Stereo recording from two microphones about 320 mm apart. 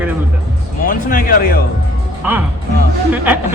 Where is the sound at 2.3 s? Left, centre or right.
Centre.